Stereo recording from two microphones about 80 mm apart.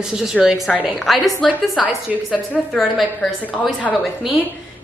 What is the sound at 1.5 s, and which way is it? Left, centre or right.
Speech, centre.